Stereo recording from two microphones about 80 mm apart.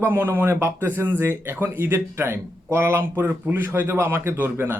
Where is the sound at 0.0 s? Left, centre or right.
Right.